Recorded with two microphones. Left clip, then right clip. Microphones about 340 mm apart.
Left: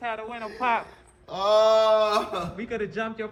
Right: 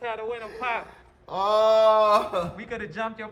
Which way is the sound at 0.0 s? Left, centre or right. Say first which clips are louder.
Right 1 dB; centre.